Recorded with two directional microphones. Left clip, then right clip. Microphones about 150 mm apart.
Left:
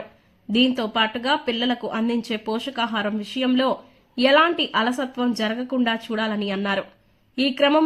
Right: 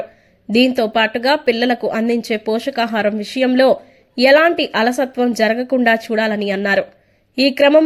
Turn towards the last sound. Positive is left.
turn(degrees=-15)  # may be behind; listen again after turning